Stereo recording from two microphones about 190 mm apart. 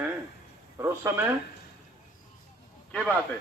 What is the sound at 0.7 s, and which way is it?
Speech, 15° right (ahead or behind).